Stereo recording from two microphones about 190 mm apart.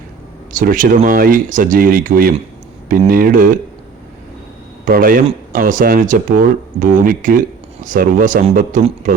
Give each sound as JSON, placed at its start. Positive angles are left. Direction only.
{"t": 0.5, "sound": "speech", "side_deg": -45}
{"t": 4.9, "sound": "speech", "side_deg": -50}